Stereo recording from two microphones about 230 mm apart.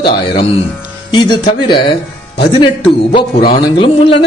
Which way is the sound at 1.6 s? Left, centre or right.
Centre.